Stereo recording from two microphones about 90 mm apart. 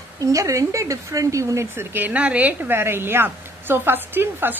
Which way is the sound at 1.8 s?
20° right (ahead or behind).